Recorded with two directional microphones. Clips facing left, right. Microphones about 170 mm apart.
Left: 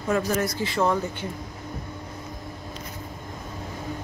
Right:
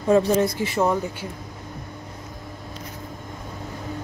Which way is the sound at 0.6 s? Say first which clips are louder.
Right 2 dB; 20° right (ahead or behind).